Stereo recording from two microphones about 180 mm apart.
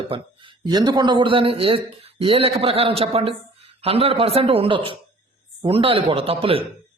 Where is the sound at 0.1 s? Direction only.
25° right (ahead or behind).